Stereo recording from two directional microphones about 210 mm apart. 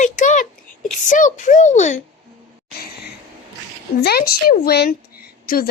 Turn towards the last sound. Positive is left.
turn(degrees=45)  # may be behind; listen again after turning